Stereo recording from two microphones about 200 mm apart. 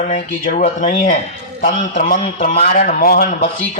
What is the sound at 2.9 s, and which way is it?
Speech, 50° left (ahead or behind).